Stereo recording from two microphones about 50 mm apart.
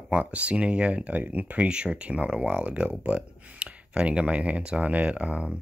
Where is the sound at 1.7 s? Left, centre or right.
Centre.